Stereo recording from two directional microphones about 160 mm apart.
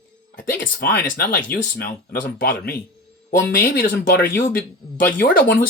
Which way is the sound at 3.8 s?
65° left (ahead or behind).